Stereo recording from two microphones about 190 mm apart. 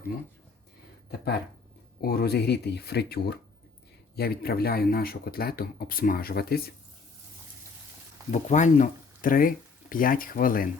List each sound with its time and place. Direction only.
2.0 s speech: 55° left (ahead or behind)
8.3 s speech: 40° left (ahead or behind)